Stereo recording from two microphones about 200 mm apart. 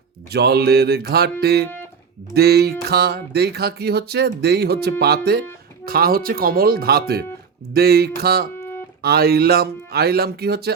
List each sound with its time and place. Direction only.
0.3 s speech: 55° right (ahead or behind)